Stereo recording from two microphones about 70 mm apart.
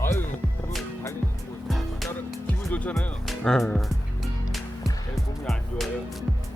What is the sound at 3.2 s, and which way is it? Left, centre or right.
Speech, centre.